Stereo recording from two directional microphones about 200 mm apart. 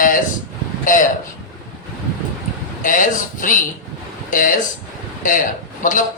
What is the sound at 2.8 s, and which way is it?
A man's voice, 40° left (ahead or behind).